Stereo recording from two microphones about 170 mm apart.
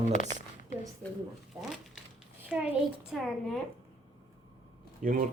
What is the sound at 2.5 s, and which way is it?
Speech, 10° right (ahead or behind).